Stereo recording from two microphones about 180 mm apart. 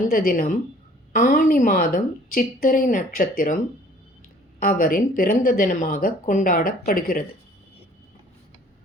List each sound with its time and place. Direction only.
0.1 s speech: 55° left (ahead or behind)
4.6 s speech: 50° left (ahead or behind)